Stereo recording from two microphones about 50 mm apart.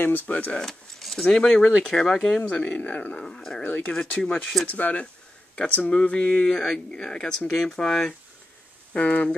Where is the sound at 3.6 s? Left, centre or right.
Left.